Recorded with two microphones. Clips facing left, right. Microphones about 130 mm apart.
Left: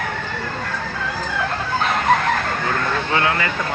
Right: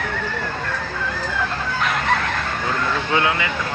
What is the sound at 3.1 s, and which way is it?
Speech, 10° right (ahead or behind).